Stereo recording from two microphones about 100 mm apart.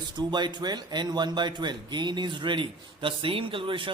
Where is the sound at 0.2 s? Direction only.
50° right (ahead or behind).